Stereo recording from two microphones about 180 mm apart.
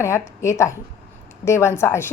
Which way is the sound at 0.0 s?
15° left (ahead or behind).